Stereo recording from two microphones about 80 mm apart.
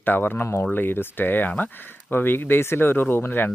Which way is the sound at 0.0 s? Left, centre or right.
Left.